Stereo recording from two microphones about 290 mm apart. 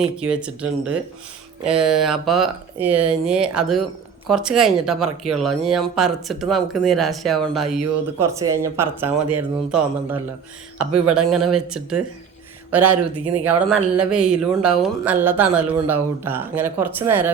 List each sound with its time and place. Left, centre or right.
0.0 s speech: centre
11.3 s speech: centre